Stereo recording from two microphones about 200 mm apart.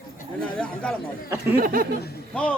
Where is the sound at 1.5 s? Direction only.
50° right (ahead or behind).